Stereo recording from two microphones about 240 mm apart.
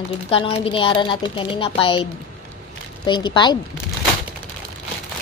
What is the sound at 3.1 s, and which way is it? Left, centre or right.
Speech, centre.